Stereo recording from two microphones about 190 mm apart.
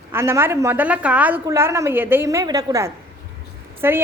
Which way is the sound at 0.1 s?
15° right (ahead or behind).